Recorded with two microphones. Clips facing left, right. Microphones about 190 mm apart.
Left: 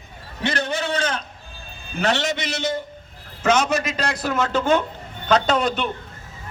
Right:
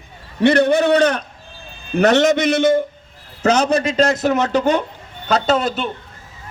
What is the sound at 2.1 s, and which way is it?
Speech, 50° right (ahead or behind).